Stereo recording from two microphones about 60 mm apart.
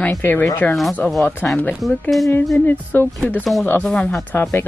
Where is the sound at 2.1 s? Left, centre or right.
Centre.